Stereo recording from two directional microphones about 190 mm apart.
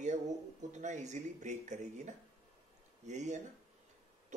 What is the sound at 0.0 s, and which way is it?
Speech, 40° right (ahead or behind).